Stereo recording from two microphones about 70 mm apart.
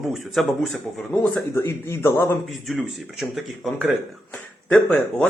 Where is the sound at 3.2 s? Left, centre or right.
Centre.